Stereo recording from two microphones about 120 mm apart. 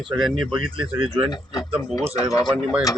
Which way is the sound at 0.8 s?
50° right (ahead or behind).